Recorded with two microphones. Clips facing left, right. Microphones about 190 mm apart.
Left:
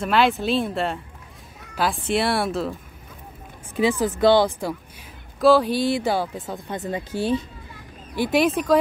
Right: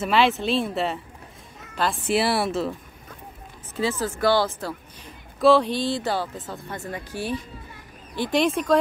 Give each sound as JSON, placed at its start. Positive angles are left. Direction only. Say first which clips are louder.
{"t": 0.0, "sound": "speech", "louder": "left 1 dB", "side_deg": 0}
{"t": 2.0, "sound": "speech", "louder": "right 1 dB", "side_deg": -5}
{"t": 3.7, "sound": "speech", "louder": "left 5 dB", "side_deg": 15}
{"t": 5.4, "sound": "speech", "louder": "left 1 dB", "side_deg": 0}
{"t": 8.2, "sound": "speech", "louder": "left 2 dB", "side_deg": 5}